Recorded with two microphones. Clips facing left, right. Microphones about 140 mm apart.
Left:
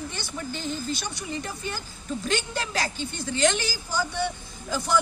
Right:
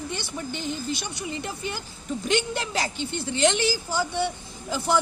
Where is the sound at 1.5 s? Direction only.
20° right (ahead or behind).